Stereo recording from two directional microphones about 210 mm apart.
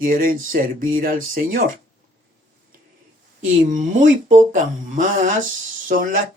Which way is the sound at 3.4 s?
35° right (ahead or behind).